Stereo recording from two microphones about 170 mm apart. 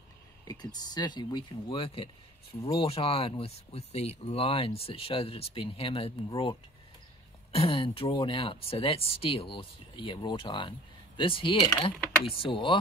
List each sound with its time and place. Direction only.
0.5 s speech: 25° left (ahead or behind)
7.5 s speech: 30° left (ahead or behind)